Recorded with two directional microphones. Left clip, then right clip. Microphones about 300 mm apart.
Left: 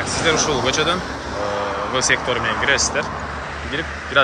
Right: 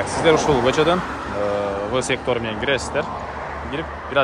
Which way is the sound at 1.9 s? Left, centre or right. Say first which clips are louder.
Left 5 dB; centre.